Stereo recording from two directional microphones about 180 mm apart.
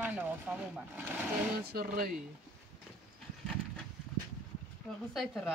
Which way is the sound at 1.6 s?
55° right (ahead or behind).